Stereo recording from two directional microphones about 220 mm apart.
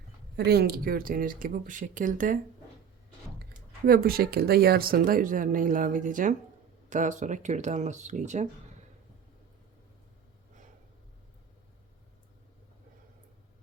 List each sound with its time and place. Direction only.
0.3 s speech: 45° right (ahead or behind)
3.8 s speech: 40° right (ahead or behind)